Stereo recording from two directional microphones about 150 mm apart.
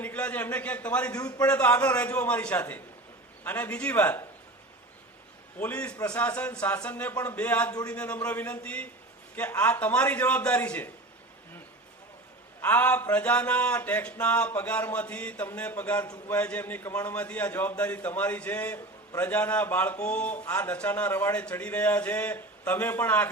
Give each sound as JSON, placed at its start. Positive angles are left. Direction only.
{"t": 0.0, "sound": "a man's voice", "side_deg": 10}
{"t": 1.1, "sound": "a man's voice", "side_deg": 25}
{"t": 1.5, "sound": "a man's voice", "side_deg": 10}
{"t": 5.5, "sound": "a man's voice", "side_deg": 10}
{"t": 12.6, "sound": "a man's voice", "side_deg": 10}
{"t": 16.0, "sound": "a man's voice", "side_deg": 25}
{"t": 16.3, "sound": "a man's voice", "side_deg": 10}